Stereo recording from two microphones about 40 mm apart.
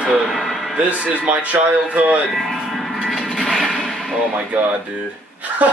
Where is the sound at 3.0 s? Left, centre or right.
Centre.